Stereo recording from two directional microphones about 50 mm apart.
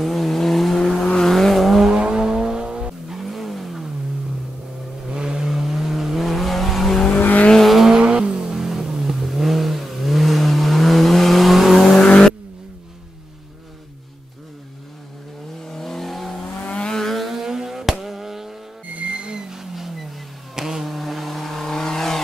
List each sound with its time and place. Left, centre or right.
0.0 s vehicle: centre
1.9 s vehicle: centre
3.1 s vehicle: centre
5.0 s vehicle: centre
7.1 s vehicle: left
7.6 s vehicle: centre
7.9 s vehicle: centre
12.0 s vehicle: centre
15.6 s vehicle: centre
16.6 s vehicle: centre
17.0 s vehicle: centre
18.9 s vehicle: right
19.5 s vehicle: centre